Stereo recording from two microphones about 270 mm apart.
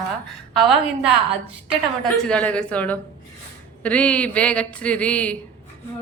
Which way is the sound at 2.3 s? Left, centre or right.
Centre.